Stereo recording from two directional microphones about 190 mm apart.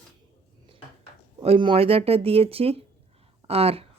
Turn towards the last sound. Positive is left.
turn(degrees=-30)  # may be behind; listen again after turning